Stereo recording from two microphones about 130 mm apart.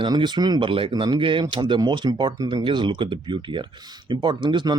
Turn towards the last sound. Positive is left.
turn(degrees=-35)  # may be behind; listen again after turning